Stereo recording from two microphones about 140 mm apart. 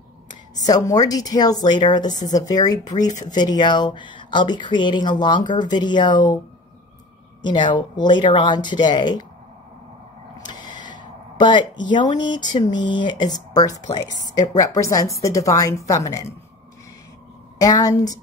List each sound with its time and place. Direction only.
0.3 s speech: 25° left (ahead or behind)
7.4 s speech: 35° left (ahead or behind)
10.3 s a sound: 30° left (ahead or behind)
11.3 s speech: 35° left (ahead or behind)
17.6 s speech: 25° left (ahead or behind)